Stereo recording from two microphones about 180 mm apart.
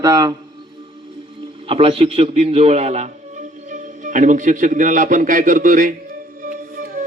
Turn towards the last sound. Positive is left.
turn(degrees=-50)  # may be behind; listen again after turning